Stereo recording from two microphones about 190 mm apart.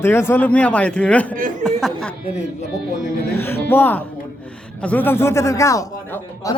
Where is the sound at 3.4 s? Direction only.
10° left (ahead or behind).